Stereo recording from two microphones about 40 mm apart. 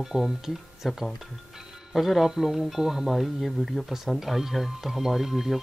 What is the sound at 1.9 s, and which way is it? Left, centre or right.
Speech, centre.